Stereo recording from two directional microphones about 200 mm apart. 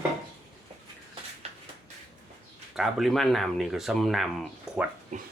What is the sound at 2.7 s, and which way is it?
Speech, centre (ahead or behind).